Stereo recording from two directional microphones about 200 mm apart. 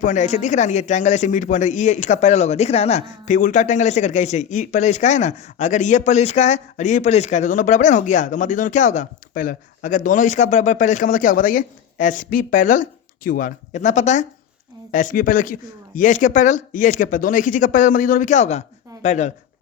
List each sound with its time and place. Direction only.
0.0 s a man's voice: 40° left (ahead or behind)